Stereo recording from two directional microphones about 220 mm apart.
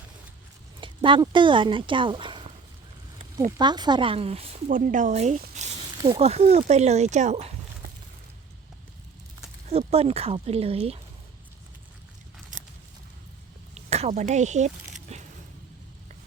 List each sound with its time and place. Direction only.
0.8 s speech: 20° right (ahead or behind)
3.6 s speech: 20° right (ahead or behind)
6.0 s speech: 20° right (ahead or behind)
6.2 s speech: 30° right (ahead or behind)
9.6 s speech: 25° right (ahead or behind)
13.7 s a sound: 30° right (ahead or behind)